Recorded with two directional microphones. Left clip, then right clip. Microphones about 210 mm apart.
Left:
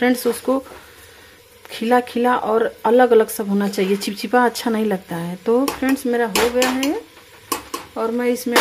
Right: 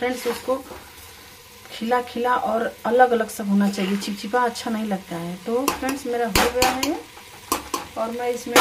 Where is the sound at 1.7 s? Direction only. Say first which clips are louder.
Left 5 dB; 40° left (ahead or behind).